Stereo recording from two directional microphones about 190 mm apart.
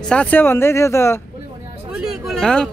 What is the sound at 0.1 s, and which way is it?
Speech, 5° left (ahead or behind).